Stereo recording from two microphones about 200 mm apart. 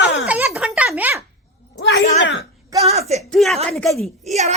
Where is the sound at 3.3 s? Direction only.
Centre (ahead or behind).